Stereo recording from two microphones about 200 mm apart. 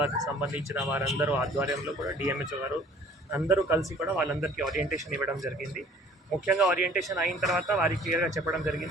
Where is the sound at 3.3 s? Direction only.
15° right (ahead or behind).